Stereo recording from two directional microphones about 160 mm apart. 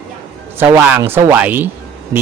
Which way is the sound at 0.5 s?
15° right (ahead or behind).